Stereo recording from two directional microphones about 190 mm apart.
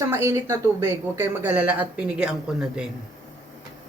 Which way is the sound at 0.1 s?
15° right (ahead or behind).